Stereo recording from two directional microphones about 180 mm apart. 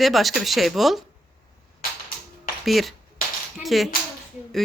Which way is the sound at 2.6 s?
Centre (ahead or behind).